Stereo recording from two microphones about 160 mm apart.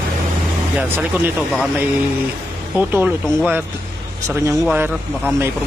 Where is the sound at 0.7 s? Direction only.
10° right (ahead or behind).